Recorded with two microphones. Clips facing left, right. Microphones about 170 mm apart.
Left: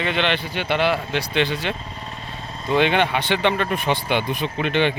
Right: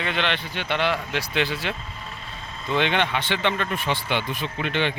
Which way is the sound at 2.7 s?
10° left (ahead or behind).